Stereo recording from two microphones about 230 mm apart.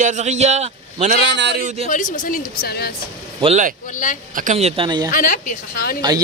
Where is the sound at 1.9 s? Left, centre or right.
Left.